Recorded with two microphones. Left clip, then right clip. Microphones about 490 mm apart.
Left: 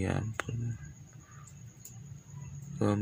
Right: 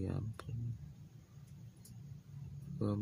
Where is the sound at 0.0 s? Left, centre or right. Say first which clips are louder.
Left 10 dB; right.